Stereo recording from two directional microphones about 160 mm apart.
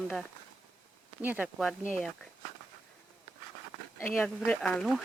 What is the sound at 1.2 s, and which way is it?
Speech, 10° right (ahead or behind).